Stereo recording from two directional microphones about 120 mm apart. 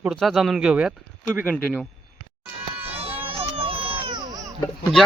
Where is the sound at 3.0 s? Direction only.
55° right (ahead or behind); by 4.4 s 35° right (ahead or behind).